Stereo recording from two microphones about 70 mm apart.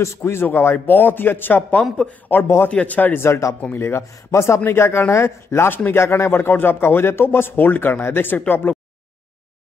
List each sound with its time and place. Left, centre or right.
0.0 s a man's voice: left; by 3.2 s centre
3.2 s speech: left